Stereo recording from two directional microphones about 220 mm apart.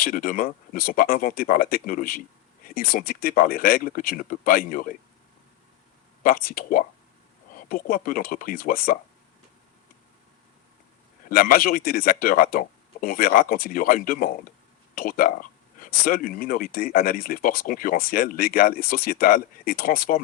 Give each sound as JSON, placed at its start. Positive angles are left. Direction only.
{"t": 0.0, "sound": "speech", "side_deg": 40}
{"t": 6.2, "sound": "speech", "side_deg": 40}
{"t": 11.3, "sound": "speech", "side_deg": 40}